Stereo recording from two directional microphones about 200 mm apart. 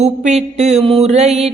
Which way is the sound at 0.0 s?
35° right (ahead or behind).